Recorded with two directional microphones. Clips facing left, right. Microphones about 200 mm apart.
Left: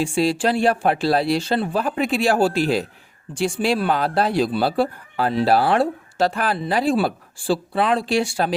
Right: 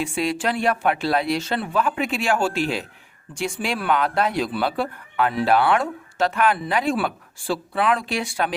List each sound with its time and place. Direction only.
0.0 s speech: 30° left (ahead or behind)